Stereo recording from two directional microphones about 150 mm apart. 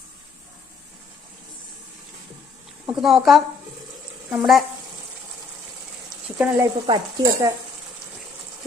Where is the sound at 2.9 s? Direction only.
Centre (ahead or behind).